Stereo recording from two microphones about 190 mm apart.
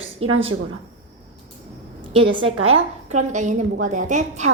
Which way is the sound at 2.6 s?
40° right (ahead or behind).